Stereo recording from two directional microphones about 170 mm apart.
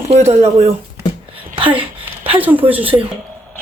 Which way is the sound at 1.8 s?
30° right (ahead or behind).